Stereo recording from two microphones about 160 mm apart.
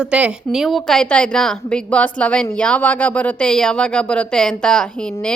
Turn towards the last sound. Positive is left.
turn(degrees=5)  # may be behind; listen again after turning